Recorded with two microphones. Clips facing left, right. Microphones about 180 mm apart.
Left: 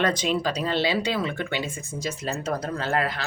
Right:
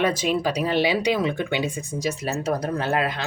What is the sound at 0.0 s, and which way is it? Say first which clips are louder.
Speech: right 2 dB; 10° right (ahead or behind).